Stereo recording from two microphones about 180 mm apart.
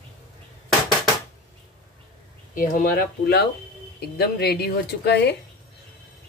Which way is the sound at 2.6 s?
50° left (ahead or behind).